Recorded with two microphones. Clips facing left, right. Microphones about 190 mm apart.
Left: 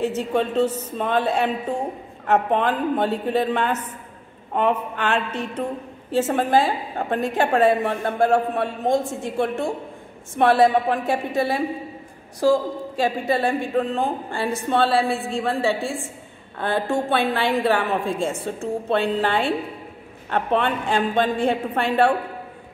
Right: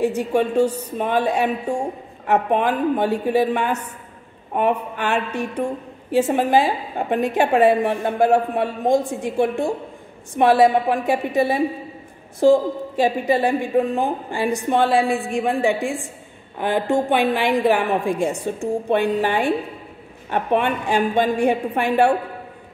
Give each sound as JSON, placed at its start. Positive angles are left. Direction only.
{"t": 0.0, "sound": "a woman's voice", "side_deg": -15}